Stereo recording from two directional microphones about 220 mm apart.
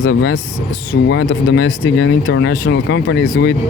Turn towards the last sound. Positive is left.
turn(degrees=60)  # may be behind; listen again after turning